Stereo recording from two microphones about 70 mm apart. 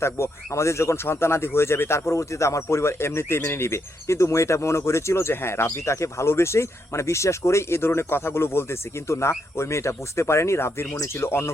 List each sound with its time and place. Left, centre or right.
0.0 s speech: left